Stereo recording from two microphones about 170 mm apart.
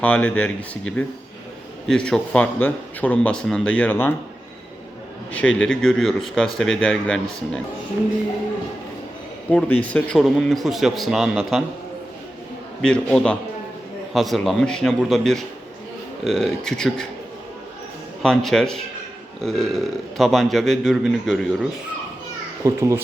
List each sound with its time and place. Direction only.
0.0 s speech: 10° left (ahead or behind)
5.3 s a man's voice: 5° left (ahead or behind)
9.5 s a man's voice: 10° left (ahead or behind)
12.8 s a man's voice: 5° left (ahead or behind)
18.2 s a man's voice: centre (ahead or behind)
22.6 s a child's voice: 15° right (ahead or behind)